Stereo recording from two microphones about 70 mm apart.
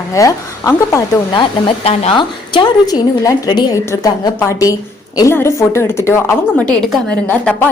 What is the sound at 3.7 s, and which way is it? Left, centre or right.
A woman's voice, left.